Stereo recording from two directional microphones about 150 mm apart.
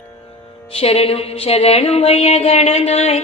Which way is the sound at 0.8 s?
40° left (ahead or behind).